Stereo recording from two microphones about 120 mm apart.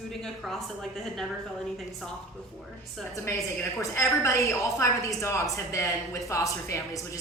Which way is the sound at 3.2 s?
20° left (ahead or behind).